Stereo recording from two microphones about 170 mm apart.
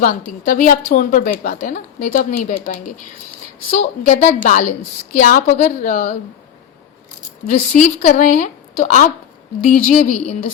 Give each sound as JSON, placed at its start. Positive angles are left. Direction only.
{"t": 0.0, "sound": "a woman's voice", "side_deg": 55}
{"t": 7.4, "sound": "a woman's voice", "side_deg": 45}